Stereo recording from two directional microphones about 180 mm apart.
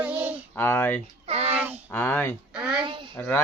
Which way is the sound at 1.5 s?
5° right (ahead or behind).